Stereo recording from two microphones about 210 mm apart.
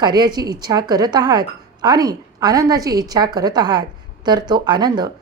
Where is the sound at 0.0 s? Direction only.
20° right (ahead or behind).